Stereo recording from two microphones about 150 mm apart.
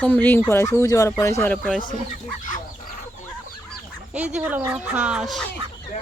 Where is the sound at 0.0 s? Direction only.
10° left (ahead or behind).